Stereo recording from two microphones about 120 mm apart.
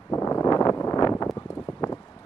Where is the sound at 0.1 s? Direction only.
30° left (ahead or behind).